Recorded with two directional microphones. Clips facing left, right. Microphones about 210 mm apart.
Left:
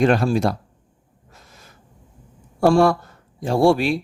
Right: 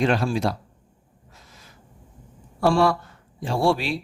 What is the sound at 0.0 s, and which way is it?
Speech, 50° left (ahead or behind).